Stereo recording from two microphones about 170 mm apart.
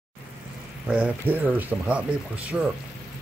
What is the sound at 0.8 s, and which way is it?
Speech, 10° right (ahead or behind).